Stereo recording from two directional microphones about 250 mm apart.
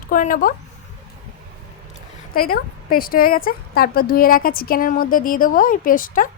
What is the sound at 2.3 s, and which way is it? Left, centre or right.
Speech, left.